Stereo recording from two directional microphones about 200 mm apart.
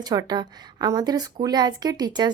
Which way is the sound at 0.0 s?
20° right (ahead or behind).